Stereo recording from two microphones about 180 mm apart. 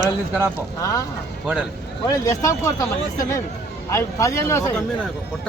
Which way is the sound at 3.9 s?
15° left (ahead or behind).